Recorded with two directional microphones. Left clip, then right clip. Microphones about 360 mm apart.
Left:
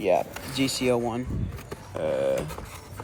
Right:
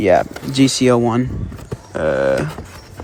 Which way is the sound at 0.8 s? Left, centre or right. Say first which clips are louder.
Right 11 dB; right.